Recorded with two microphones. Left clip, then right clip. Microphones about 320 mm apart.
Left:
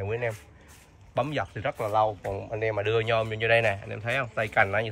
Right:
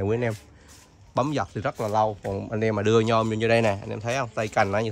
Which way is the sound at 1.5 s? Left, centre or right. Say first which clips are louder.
Right 1 dB; right.